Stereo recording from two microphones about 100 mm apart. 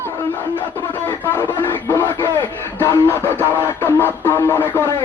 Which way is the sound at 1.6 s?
20° left (ahead or behind).